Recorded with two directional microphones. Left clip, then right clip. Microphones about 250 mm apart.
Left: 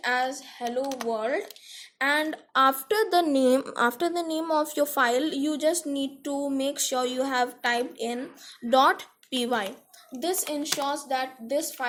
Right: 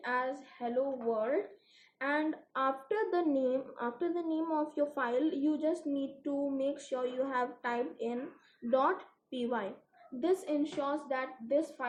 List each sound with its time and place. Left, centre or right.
0.0 s a woman's voice: left